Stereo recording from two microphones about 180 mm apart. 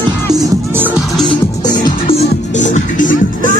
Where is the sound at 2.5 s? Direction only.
45° left (ahead or behind).